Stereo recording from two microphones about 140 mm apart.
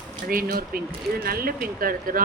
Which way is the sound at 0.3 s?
90° right.